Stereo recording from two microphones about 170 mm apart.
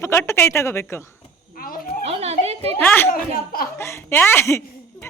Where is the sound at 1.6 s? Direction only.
60° left (ahead or behind).